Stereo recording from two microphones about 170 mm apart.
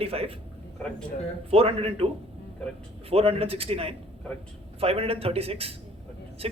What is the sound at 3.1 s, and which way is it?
Speech, 35° right (ahead or behind).